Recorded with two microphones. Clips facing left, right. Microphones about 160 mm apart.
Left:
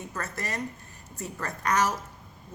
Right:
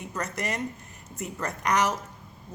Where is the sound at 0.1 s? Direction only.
20° right (ahead or behind).